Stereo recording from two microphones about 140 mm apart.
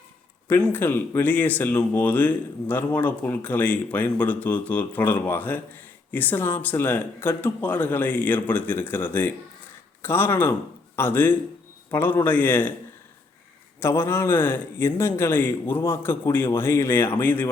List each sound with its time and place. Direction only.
0.4 s speech: 15° left (ahead or behind)
13.7 s speech: 15° left (ahead or behind)